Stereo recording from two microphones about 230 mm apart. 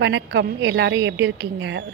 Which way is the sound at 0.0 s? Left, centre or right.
Right.